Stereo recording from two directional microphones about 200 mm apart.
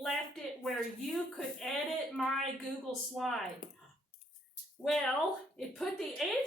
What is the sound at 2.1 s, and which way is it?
A woman's voice, 5° left (ahead or behind).